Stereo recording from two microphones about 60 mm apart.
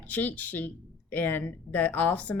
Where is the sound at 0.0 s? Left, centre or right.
Left.